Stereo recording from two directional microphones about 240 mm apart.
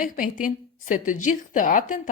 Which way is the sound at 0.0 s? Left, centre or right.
Left.